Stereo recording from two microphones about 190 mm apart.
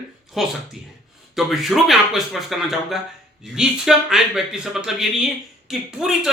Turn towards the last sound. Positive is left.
turn(degrees=0)  # may be behind; listen again after turning